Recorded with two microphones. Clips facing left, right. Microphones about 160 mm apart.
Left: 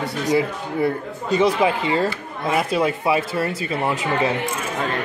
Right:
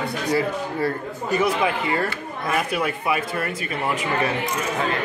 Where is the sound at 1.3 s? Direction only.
20° left (ahead or behind).